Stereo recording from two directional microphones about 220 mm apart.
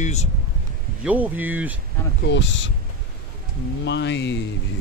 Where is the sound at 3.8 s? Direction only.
50° left (ahead or behind).